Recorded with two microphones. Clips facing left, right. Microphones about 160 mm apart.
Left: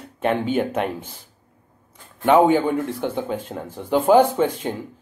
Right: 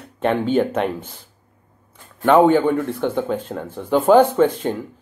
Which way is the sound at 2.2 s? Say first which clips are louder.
Right 2 dB; 15° left (ahead or behind).